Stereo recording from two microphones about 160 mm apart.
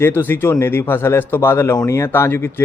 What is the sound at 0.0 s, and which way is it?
Speech, 15° left (ahead or behind).